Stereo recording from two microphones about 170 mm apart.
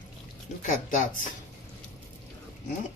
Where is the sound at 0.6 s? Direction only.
50° left (ahead or behind).